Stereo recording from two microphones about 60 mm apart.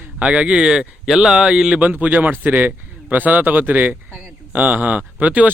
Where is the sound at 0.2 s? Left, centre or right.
Centre.